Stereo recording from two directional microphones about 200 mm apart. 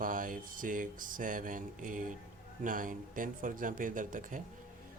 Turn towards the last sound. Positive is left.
turn(degrees=-40)  # may be behind; listen again after turning